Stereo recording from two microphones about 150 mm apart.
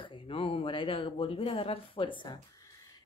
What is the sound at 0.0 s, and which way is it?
Speech, 35° left (ahead or behind).